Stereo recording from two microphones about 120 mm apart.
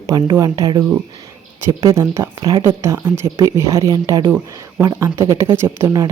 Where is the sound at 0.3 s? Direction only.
30° right (ahead or behind).